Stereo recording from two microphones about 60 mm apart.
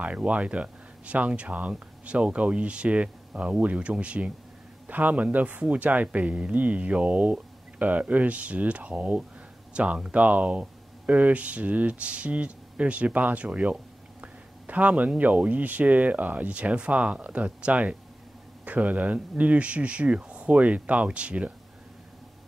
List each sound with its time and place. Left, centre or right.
0.0 s speech: right